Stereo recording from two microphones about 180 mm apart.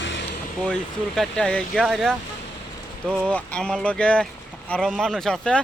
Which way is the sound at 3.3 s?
5° left (ahead or behind).